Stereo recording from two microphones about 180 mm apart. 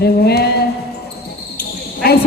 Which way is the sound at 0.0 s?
65° left (ahead or behind).